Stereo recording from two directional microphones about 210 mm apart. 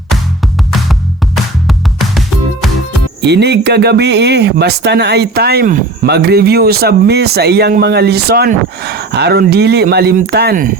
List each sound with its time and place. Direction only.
1.6 s music: centre (ahead or behind)
3.2 s speech: 55° right (ahead or behind)